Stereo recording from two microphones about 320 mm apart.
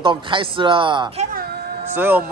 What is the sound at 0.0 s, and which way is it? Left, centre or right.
A man's voice, centre.